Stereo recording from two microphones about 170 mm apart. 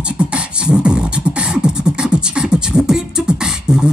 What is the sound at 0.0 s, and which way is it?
Beatboxing, 5° right (ahead or behind).